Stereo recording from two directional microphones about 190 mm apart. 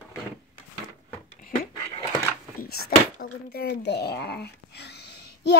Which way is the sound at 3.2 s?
60° left (ahead or behind).